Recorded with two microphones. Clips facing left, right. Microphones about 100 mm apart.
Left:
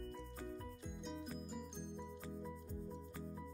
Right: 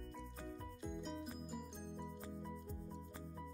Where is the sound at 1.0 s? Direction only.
Centre (ahead or behind).